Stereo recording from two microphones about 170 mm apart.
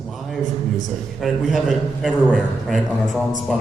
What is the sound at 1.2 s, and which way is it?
A man's voice, centre (ahead or behind).